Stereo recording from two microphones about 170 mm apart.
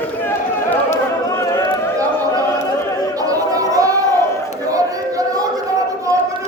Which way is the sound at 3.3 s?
20° right (ahead or behind).